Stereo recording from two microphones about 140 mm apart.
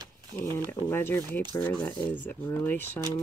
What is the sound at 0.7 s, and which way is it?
Speech, 15° left (ahead or behind).